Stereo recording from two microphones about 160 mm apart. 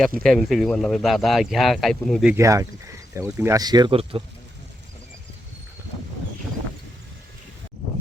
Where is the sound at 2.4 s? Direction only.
20° right (ahead or behind); by 4.2 s 35° right (ahead or behind).